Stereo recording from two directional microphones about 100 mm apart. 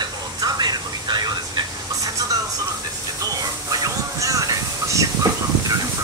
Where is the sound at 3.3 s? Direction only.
35° right (ahead or behind).